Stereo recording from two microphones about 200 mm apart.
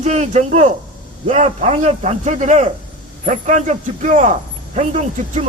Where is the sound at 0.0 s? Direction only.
35° right (ahead or behind).